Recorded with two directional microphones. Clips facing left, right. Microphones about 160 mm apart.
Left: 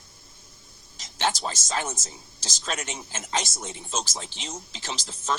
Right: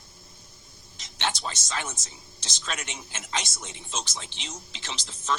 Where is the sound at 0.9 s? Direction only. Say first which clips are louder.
Left 4 dB; 40° left (ahead or behind).